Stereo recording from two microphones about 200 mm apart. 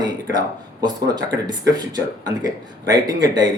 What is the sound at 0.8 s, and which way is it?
Speech, 20° right (ahead or behind).